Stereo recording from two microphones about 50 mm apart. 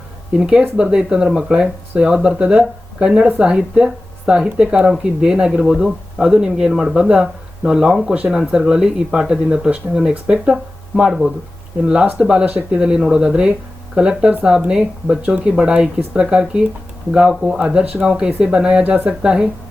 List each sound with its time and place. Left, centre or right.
0.3 s speech: centre
2.4 s speech: right
12.1 s speech: right